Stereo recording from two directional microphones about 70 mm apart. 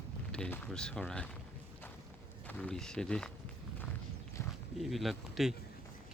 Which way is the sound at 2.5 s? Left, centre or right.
Centre.